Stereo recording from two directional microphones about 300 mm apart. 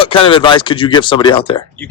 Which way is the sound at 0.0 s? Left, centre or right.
Centre.